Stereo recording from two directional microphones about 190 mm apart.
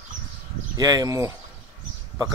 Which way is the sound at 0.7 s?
20° right (ahead or behind).